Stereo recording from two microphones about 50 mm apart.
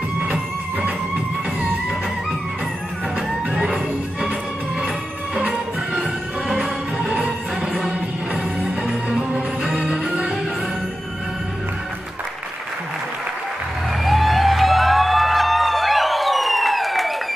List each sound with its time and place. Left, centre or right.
3.5 s music: centre
6.6 s music: centre
8.8 s music: centre
14.0 s a sound: centre